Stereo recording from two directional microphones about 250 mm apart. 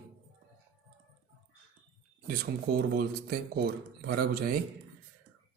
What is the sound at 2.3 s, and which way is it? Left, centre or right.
A man's voice, right.